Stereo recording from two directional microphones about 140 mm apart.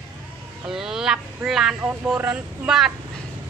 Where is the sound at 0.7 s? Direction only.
5° right (ahead or behind).